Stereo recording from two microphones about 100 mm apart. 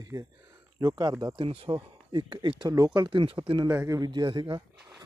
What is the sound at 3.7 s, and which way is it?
Speech, 25° right (ahead or behind).